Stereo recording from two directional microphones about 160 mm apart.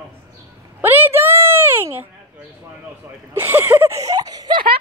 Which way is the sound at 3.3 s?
15° right (ahead or behind).